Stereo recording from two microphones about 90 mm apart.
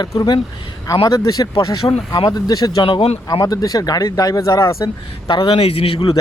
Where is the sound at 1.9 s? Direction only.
85° left.